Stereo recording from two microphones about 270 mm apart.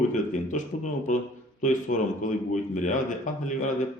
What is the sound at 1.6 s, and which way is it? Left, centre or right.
A man's voice, left.